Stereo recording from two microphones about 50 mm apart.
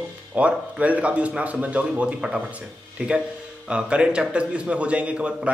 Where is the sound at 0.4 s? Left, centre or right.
Right.